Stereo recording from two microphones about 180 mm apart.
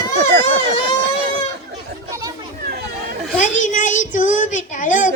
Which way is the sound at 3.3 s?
45° left (ahead or behind).